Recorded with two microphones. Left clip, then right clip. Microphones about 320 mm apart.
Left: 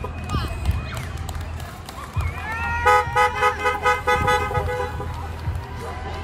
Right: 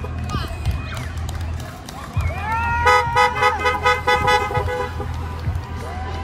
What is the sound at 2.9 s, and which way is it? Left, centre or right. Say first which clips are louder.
Vehicle: right 1 dB; right.